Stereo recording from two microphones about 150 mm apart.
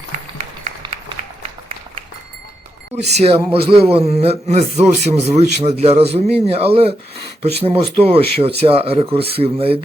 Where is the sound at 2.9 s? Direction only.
45° right (ahead or behind).